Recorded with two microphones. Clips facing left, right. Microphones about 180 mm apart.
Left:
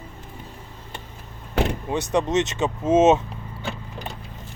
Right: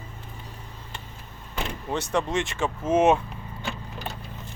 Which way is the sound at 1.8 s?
15° left (ahead or behind).